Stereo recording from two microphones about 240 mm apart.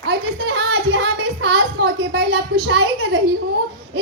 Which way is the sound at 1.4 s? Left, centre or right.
Right.